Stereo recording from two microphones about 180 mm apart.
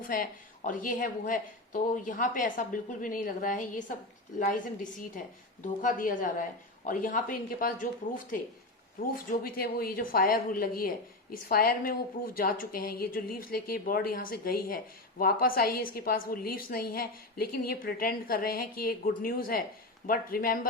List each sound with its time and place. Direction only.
0.0 s speech: 50° left (ahead or behind)
9.4 s speech: 55° left (ahead or behind)